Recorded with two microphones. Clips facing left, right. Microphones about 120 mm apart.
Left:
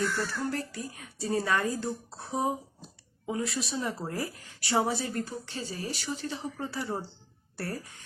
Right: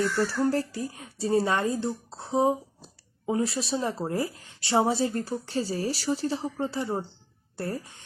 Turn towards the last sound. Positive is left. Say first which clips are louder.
# right 4 dB
turn(degrees=-25)  # may be behind; listen again after turning